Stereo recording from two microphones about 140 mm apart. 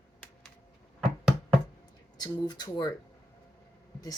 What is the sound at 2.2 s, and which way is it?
Speech, 30° left (ahead or behind).